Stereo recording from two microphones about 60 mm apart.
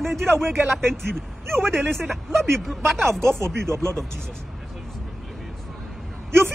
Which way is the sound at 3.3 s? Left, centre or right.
Right.